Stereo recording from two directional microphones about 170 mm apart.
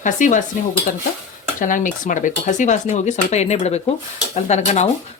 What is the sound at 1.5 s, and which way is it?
Speech, 50° left (ahead or behind).